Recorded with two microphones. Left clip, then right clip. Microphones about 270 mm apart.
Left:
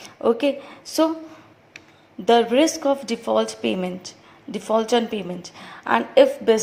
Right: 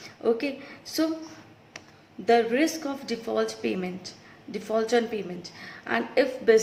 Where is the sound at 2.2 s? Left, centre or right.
Left.